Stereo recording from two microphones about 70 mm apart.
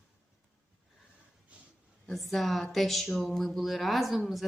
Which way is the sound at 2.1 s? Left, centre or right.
Centre.